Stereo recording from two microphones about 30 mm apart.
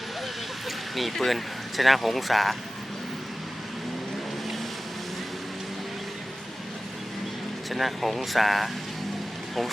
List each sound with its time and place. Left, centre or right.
0.9 s speech: centre
7.7 s speech: centre